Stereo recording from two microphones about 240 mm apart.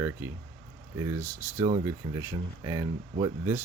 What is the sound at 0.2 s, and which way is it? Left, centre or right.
Speech, centre.